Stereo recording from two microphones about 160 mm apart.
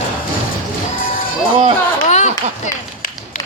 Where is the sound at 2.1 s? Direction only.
45° left (ahead or behind).